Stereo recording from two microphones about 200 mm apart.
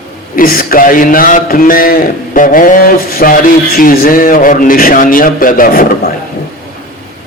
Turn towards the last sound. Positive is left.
turn(degrees=45)  # may be behind; listen again after turning